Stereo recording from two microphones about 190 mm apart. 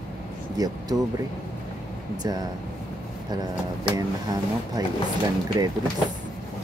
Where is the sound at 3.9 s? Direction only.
20° right (ahead or behind).